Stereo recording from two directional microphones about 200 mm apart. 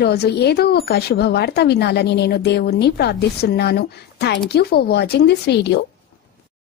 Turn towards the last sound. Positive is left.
turn(degrees=55)  # may be behind; listen again after turning